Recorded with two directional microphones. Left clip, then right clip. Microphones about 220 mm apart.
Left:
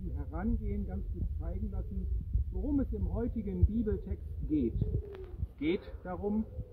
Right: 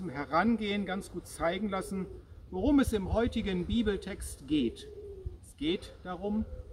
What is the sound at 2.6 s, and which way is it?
A man's voice, 30° right (ahead or behind).